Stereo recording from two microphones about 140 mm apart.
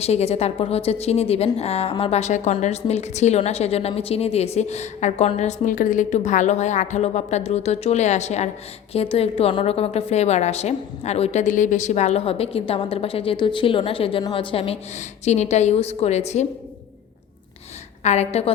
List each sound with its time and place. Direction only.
0.0 s a woman's voice: 50° left (ahead or behind)
18.0 s a woman's voice: 50° left (ahead or behind)